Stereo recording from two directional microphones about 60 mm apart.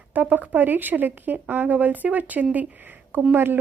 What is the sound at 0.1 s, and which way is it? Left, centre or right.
Speech, right.